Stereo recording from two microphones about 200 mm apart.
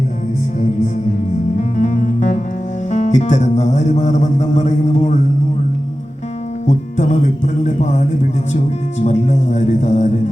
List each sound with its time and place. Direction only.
1.8 s music: 40° left (ahead or behind)
6.7 s music: 35° left (ahead or behind)